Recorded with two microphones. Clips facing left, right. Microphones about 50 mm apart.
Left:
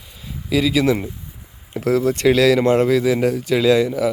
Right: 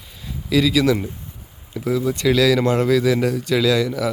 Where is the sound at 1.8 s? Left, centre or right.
Left.